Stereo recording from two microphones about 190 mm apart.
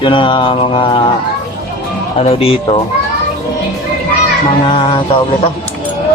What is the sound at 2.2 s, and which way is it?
Speech, 30° left (ahead or behind).